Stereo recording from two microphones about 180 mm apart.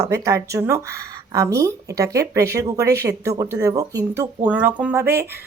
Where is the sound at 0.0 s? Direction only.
15° right (ahead or behind).